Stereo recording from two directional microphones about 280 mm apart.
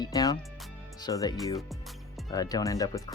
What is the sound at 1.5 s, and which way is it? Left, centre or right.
Music, centre.